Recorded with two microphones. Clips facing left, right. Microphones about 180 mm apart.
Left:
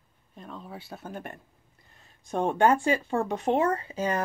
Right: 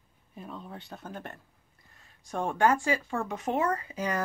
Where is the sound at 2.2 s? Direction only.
25° left (ahead or behind).